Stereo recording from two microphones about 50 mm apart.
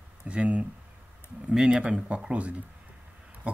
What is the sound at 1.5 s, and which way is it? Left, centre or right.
Speech, centre.